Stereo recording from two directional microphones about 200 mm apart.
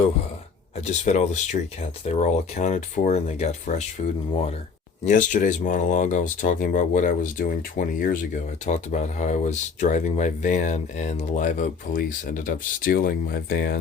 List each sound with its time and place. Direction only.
0.8 s speech: 35° left (ahead or behind)
5.0 s speech: 40° left (ahead or behind)